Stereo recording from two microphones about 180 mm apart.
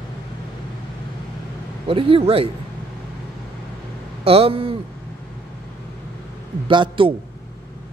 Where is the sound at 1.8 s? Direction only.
30° right (ahead or behind).